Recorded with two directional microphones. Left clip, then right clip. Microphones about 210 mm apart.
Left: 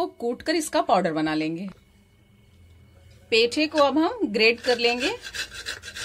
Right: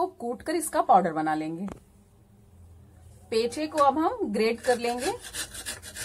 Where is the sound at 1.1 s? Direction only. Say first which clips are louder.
Left 2 dB; 40° left (ahead or behind).